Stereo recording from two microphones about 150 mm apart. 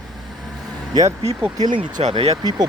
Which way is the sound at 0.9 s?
20° right (ahead or behind).